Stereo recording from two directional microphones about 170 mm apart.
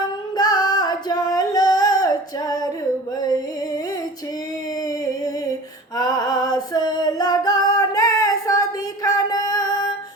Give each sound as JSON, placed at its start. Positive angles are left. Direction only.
{"t": 0.3, "sound": "singing", "side_deg": 25}
{"t": 6.0, "sound": "female singing", "side_deg": 20}